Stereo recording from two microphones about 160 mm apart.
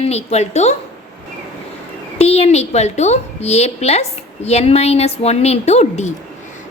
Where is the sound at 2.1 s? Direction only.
40° left (ahead or behind).